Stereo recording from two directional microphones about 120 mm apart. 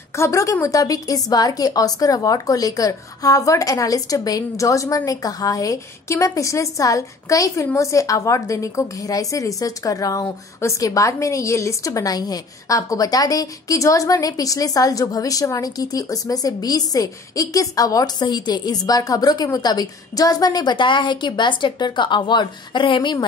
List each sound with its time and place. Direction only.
0.1 s a woman's voice: 25° left (ahead or behind); by 23.1 s 40° left (ahead or behind)